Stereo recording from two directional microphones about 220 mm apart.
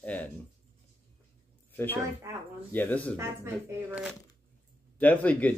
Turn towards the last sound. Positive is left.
turn(degrees=5)  # may be behind; listen again after turning